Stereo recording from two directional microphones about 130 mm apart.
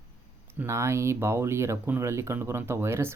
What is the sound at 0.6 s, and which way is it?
Speech, 20° right (ahead or behind).